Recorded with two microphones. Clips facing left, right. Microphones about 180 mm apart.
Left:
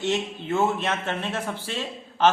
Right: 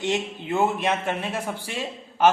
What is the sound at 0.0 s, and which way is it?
A man's voice, 15° right (ahead or behind).